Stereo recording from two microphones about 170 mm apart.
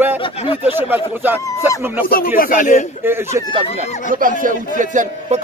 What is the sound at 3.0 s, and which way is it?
Speech, 15° right (ahead or behind).